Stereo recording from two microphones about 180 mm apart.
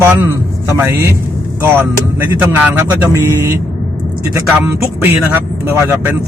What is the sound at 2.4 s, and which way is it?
Speech, 10° right (ahead or behind).